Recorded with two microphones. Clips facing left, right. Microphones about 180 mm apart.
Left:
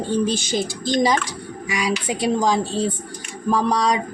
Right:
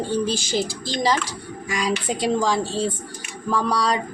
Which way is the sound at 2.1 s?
10° left (ahead or behind).